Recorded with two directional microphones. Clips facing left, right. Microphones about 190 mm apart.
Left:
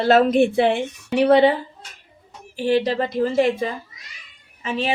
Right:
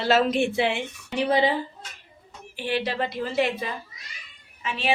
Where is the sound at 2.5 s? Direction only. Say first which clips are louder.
Left 8 dB; 40° left (ahead or behind).